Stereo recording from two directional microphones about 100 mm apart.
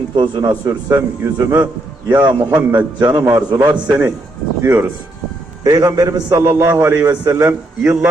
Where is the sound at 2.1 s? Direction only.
50° right (ahead or behind).